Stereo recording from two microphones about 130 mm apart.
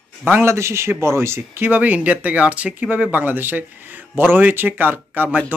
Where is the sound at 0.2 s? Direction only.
15° right (ahead or behind).